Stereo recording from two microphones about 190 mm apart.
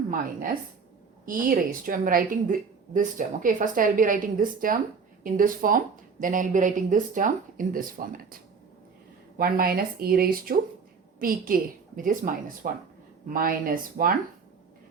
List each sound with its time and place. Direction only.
1.2 s a woman's voice: 45° right (ahead or behind)
9.4 s a woman's voice: 50° right (ahead or behind)